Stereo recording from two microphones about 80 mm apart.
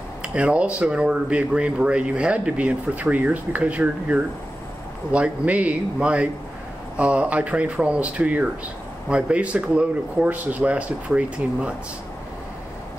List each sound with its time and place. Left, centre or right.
0.2 s speech: centre